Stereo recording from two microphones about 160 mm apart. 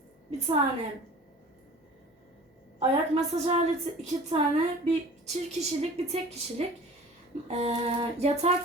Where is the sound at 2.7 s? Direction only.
45° right (ahead or behind).